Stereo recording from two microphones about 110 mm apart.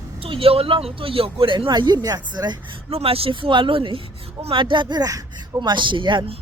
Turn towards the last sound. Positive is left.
turn(degrees=-45)  # may be behind; listen again after turning